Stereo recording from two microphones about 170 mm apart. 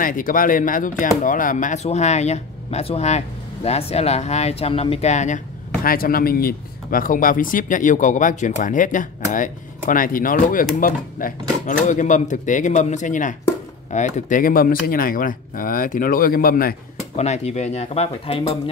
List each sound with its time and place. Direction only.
0.0 s speech: 55° left (ahead or behind)
5.9 s speech: 60° left (ahead or behind)
17.2 s speech: 40° left (ahead or behind)